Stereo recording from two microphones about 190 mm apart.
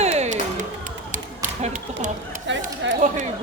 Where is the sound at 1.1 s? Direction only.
40° right (ahead or behind).